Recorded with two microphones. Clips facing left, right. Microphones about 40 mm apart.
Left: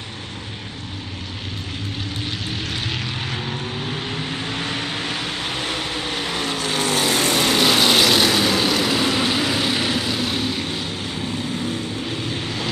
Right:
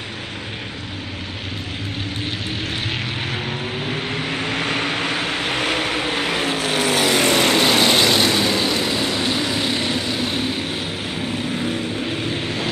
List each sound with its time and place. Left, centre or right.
3.4 s vehicle: centre
4.1 s vehicle: right
7.2 s vehicle: right
7.6 s vehicle: centre
9.0 s vehicle: centre
10.4 s vehicle: right
12.2 s waves: right